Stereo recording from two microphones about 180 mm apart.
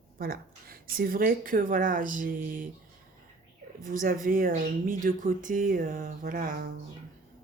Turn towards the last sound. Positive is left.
turn(degrees=-50)  # may be behind; listen again after turning